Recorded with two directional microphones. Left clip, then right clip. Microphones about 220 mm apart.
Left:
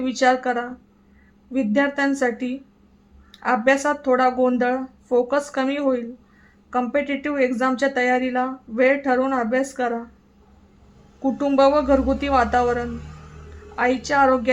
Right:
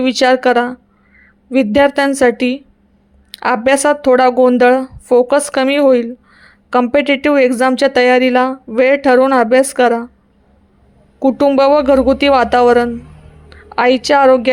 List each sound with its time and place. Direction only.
0.0 s a woman's voice: 40° right (ahead or behind)
11.2 s a woman's voice: 40° right (ahead or behind)